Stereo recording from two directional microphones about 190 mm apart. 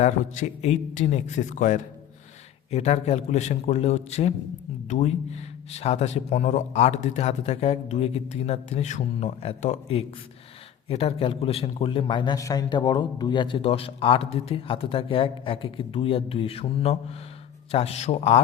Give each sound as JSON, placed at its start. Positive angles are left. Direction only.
{"t": 0.0, "sound": "a man's voice", "side_deg": 35}